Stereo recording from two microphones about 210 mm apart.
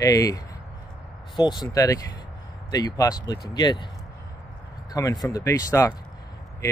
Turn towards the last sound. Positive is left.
turn(degrees=15)  # may be behind; listen again after turning